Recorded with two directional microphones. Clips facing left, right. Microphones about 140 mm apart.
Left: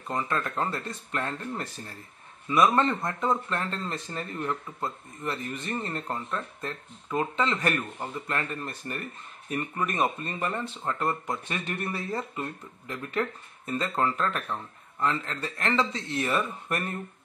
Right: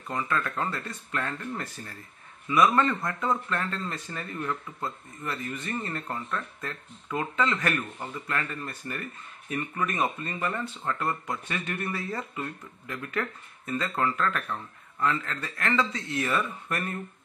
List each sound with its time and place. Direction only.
0.1 s speech: 30° left (ahead or behind)
2.6 s speech: 30° left (ahead or behind)